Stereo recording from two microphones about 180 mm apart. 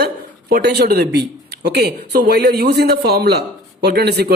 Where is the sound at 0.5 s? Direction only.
65° right (ahead or behind).